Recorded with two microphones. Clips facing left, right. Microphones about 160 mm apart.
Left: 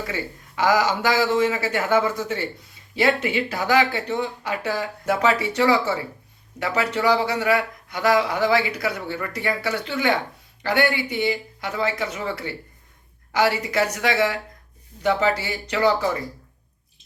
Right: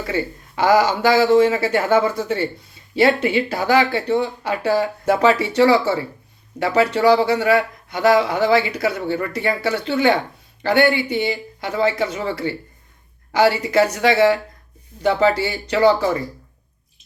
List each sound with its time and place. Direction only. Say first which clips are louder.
0.0 s speech: right 6 dB; 30° right (ahead or behind)